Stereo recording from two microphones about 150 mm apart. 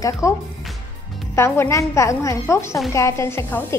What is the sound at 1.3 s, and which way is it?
A woman's voice, 15° left (ahead or behind).